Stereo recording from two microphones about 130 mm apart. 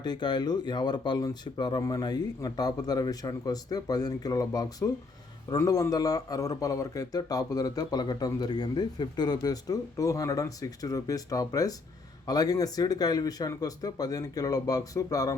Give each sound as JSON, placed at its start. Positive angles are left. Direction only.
{"t": 0.0, "sound": "a man's voice", "side_deg": 35}